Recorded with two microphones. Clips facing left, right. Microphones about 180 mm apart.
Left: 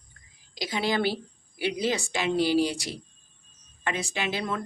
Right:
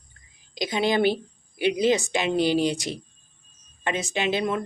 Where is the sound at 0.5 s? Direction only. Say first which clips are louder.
Right 4 dB; 20° right (ahead or behind).